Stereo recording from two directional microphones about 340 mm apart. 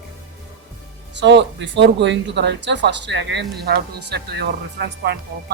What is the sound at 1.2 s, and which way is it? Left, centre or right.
Speech, right.